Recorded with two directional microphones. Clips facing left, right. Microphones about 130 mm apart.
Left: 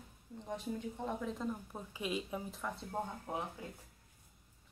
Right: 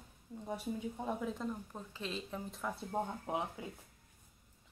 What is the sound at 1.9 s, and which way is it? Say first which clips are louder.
Speech: left 4 dB; 10° left (ahead or behind).